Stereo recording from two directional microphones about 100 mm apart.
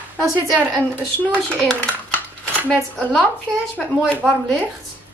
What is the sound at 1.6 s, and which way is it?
Speech, 10° left (ahead or behind).